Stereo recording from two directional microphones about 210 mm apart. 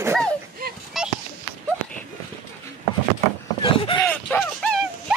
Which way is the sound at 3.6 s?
25° left (ahead or behind).